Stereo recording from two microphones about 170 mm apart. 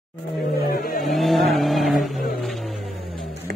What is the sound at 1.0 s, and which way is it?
Speech, centre (ahead or behind).